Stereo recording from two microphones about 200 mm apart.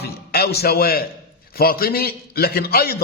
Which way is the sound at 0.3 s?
50° left (ahead or behind).